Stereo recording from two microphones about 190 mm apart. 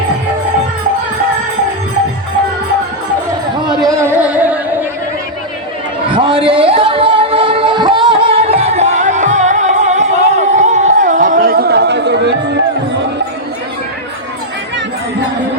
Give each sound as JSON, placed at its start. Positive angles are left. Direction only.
{"t": 3.8, "sound": "music", "side_deg": -15}
{"t": 6.1, "sound": "singing", "side_deg": -25}